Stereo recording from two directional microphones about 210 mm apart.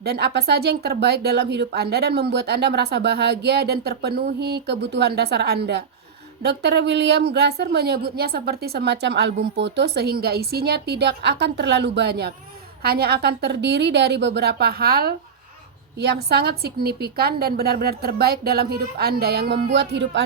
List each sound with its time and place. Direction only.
0.0 s speech: 50° right (ahead or behind)